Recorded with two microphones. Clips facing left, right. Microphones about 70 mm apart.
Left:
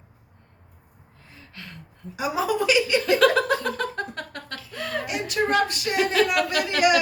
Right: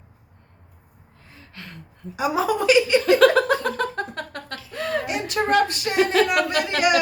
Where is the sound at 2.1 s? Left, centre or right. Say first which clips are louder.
Right 2 dB; right.